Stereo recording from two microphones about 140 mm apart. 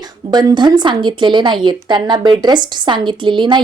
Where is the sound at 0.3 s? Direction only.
30° right (ahead or behind).